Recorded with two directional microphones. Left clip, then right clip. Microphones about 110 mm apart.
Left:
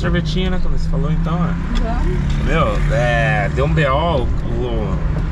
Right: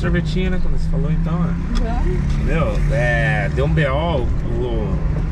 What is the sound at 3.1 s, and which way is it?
Speech, 5° right (ahead or behind).